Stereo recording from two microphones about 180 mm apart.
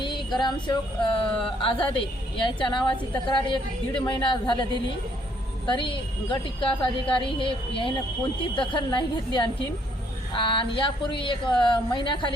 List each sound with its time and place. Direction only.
0.0 s female singing: 25° left (ahead or behind)
1.6 s a woman's voice: 30° left (ahead or behind)